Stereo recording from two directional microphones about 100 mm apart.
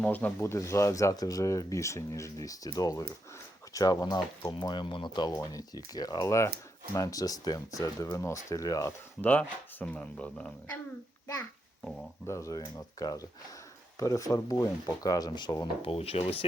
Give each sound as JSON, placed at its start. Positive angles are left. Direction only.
{"t": 0.0, "sound": "speech", "side_deg": 15}
{"t": 9.2, "sound": "speech", "side_deg": 15}
{"t": 12.2, "sound": "speech", "side_deg": 30}
{"t": 15.8, "sound": "speech", "side_deg": 75}